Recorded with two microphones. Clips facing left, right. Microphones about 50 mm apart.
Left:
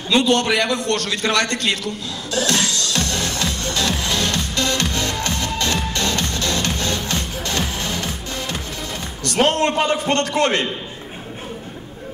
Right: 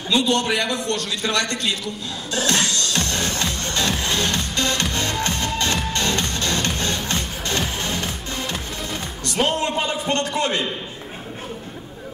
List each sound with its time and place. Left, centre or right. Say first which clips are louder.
0.1 s a man's voice: left 3 dB; left
2.3 s music: left 1 dB; right
9.3 s a man's voice: left 4 dB; left